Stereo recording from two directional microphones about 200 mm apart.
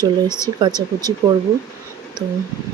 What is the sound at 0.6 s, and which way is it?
Speech, 20° right (ahead or behind).